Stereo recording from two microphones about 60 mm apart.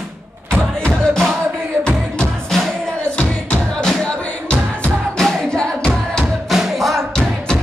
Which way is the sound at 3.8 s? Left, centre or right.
Centre.